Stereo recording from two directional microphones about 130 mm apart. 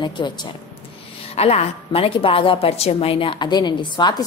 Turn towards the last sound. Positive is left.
turn(degrees=35)  # may be behind; listen again after turning